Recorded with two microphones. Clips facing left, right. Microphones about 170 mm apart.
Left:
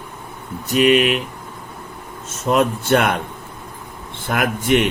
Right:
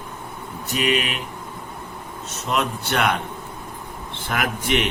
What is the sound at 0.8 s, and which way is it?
Speech, 40° left (ahead or behind).